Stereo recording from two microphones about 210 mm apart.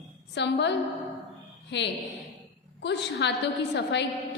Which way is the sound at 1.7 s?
55° left (ahead or behind).